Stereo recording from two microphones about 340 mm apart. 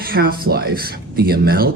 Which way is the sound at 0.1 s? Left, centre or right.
Right.